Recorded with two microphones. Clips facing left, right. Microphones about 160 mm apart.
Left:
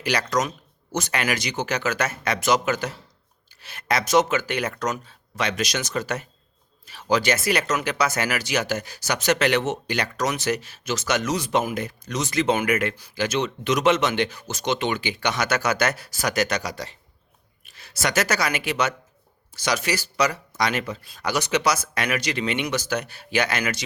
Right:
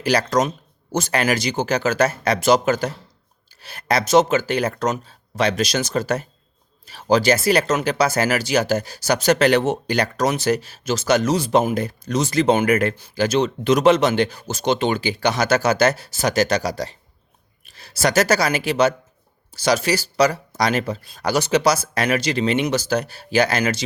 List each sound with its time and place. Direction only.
0.0 s speech: 35° right (ahead or behind)